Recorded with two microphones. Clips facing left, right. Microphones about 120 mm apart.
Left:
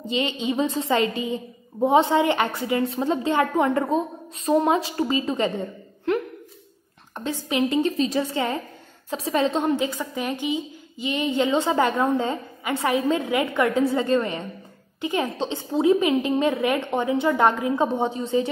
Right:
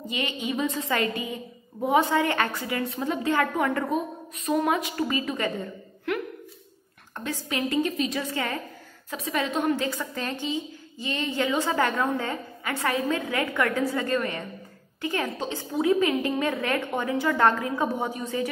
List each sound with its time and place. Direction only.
0.1 s a woman's voice: 25° left (ahead or behind)